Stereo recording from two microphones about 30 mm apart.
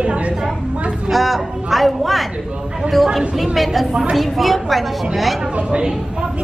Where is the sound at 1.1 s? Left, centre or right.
Centre.